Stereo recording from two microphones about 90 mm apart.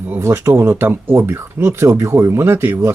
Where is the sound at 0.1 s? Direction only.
30° right (ahead or behind).